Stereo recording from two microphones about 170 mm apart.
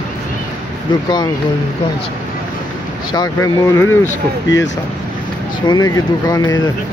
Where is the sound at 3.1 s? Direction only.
25° left (ahead or behind).